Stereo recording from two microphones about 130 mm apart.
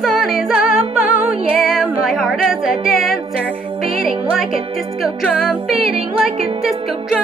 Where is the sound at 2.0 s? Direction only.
Centre (ahead or behind).